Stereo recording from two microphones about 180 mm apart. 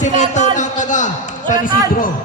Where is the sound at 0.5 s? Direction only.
45° left (ahead or behind).